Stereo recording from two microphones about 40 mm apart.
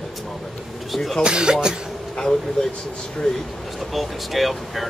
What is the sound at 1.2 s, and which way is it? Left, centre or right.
Speech, right.